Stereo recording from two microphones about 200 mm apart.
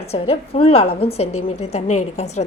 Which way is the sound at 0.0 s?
30° left (ahead or behind).